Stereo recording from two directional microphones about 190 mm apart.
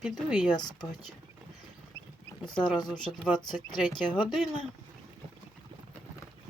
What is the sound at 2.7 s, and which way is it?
Speech, 25° left (ahead or behind).